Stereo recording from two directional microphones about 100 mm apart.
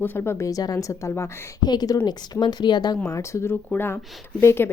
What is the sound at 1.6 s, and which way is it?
Speech, 45° left (ahead or behind).